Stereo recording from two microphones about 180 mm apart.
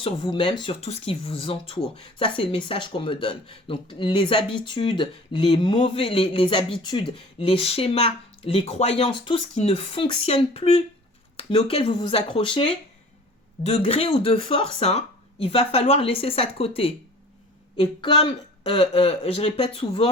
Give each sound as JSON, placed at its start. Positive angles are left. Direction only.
{"t": 0.0, "sound": "speech", "side_deg": 30}
{"t": 13.7, "sound": "speech", "side_deg": 35}